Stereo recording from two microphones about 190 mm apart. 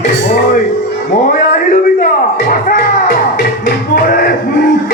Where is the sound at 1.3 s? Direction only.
45° left (ahead or behind).